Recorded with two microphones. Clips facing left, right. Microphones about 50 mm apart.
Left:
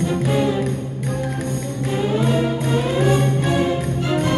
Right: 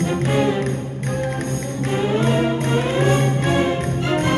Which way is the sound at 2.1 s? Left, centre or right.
Right.